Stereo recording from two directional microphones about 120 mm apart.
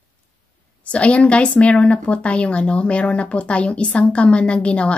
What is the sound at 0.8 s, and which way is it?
A woman's voice, 10° left (ahead or behind).